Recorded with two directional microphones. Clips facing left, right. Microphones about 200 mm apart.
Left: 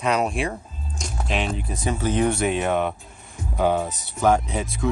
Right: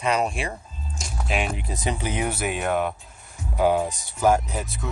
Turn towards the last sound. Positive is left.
turn(degrees=0)  # may be behind; listen again after turning